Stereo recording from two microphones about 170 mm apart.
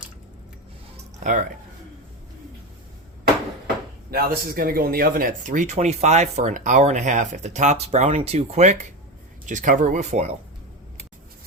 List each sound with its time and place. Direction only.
1.2 s speech: 45° right (ahead or behind)
4.1 s speech: 60° right (ahead or behind); by 10.3 s 40° right (ahead or behind)